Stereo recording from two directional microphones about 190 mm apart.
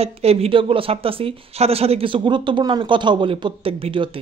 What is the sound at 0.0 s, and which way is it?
A man's voice, 30° right (ahead or behind).